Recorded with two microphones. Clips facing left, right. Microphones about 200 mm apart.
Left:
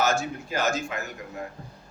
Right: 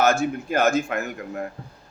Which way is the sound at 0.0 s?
55° right (ahead or behind).